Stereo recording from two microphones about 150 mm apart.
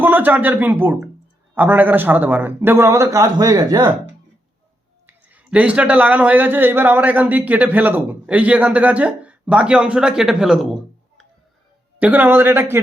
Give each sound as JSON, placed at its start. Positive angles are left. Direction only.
{"t": 0.0, "sound": "a man's voice", "side_deg": -10}
{"t": 5.0, "sound": "a man's voice", "side_deg": -10}
{"t": 11.9, "sound": "a man's voice", "side_deg": -10}